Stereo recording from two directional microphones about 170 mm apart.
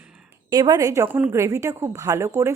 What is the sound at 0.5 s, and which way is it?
A woman's voice, 20° right (ahead or behind).